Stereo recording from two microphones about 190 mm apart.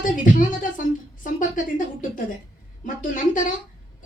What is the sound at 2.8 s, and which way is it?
Speech, 45° left (ahead or behind).